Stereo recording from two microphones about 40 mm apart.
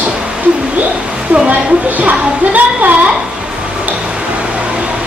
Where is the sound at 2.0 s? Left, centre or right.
Right.